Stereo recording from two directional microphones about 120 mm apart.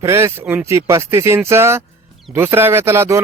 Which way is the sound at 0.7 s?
20° right (ahead or behind).